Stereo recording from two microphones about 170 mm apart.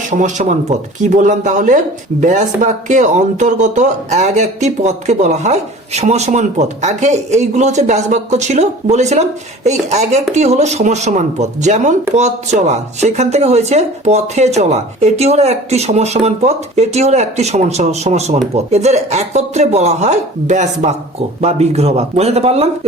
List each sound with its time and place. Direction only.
0.1 s speech: 45° right (ahead or behind)